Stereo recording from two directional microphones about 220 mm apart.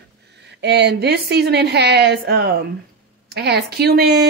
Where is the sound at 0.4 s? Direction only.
50° right (ahead or behind).